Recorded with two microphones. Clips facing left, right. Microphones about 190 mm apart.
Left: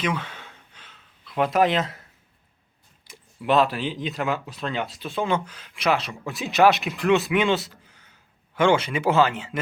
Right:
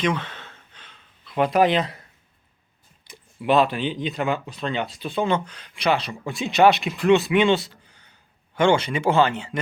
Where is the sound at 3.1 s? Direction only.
Centre (ahead or behind).